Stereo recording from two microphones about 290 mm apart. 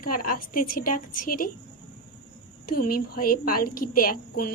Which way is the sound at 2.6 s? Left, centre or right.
Left.